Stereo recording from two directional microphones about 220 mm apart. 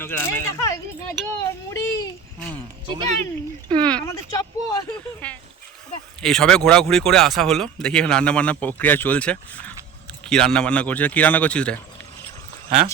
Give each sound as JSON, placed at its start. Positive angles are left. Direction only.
{"t": 0.0, "sound": "speech", "side_deg": 10}
{"t": 1.4, "sound": "a sound", "side_deg": 15}
{"t": 2.8, "sound": "speech", "side_deg": -20}
{"t": 3.8, "sound": "speech", "side_deg": 10}